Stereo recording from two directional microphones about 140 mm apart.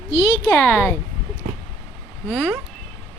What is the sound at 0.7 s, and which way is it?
Speech, 20° left (ahead or behind).